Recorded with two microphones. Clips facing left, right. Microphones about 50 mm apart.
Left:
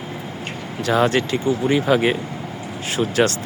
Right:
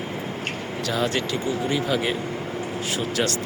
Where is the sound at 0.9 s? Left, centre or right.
Left.